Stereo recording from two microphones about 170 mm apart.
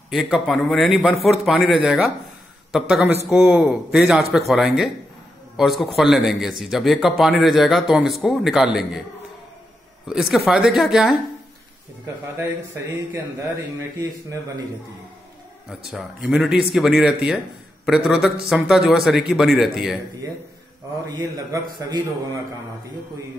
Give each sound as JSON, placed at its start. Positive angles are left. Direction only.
{"t": 0.1, "sound": "speech", "side_deg": 0}
{"t": 10.0, "sound": "speech", "side_deg": 0}
{"t": 12.4, "sound": "speech", "side_deg": -15}
{"t": 15.7, "sound": "speech", "side_deg": 0}
{"t": 21.5, "sound": "a man's voice", "side_deg": -25}